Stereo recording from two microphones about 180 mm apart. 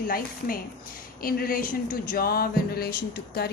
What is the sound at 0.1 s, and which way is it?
A woman's voice, 55° left (ahead or behind).